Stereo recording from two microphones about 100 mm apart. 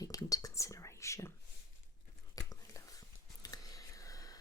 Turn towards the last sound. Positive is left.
turn(degrees=35)  # may be behind; listen again after turning